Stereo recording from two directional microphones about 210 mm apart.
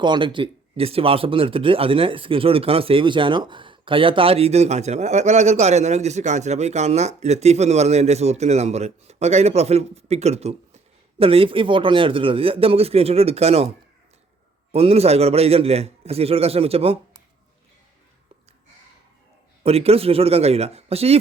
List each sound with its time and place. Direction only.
0.0 s a man's voice: 25° right (ahead or behind)
14.7 s a man's voice: 30° right (ahead or behind)
19.6 s a man's voice: 30° right (ahead or behind)